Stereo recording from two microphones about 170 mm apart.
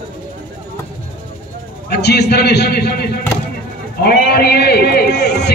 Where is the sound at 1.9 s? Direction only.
75° left (ahead or behind).